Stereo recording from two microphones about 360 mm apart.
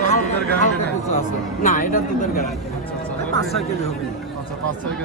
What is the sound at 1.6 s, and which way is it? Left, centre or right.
Speech, left.